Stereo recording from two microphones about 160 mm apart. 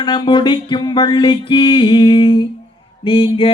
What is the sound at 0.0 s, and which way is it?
Music, 30° left (ahead or behind).